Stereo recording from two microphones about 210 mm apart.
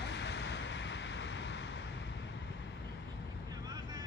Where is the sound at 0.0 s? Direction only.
55° left (ahead or behind).